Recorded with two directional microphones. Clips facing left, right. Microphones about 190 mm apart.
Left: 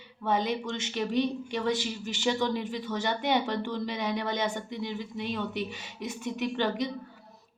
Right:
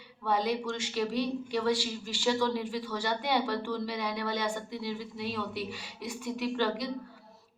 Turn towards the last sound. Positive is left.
turn(degrees=20)  # may be behind; listen again after turning